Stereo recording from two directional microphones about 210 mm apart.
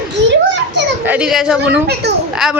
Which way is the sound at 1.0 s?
5° right (ahead or behind).